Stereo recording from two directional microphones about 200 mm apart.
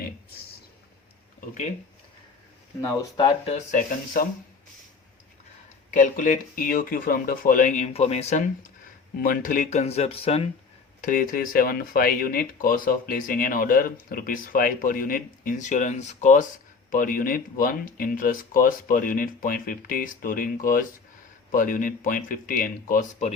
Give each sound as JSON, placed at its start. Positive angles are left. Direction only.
{"t": 2.8, "sound": "speech", "side_deg": 15}
{"t": 3.2, "sound": "speech", "side_deg": 30}
{"t": 5.9, "sound": "speech", "side_deg": 40}
{"t": 11.0, "sound": "speech", "side_deg": 45}